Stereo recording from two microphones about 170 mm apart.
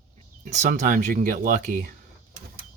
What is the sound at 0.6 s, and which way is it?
Speech, 50° right (ahead or behind).